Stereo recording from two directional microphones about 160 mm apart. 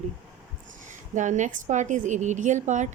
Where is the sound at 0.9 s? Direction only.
50° right (ahead or behind).